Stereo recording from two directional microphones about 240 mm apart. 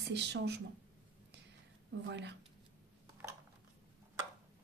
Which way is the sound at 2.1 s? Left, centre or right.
Right.